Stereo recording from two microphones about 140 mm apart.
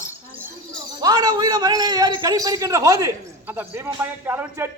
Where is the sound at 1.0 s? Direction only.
30° right (ahead or behind).